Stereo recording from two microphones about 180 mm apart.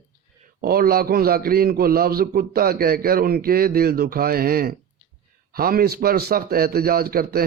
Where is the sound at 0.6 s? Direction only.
55° right (ahead or behind).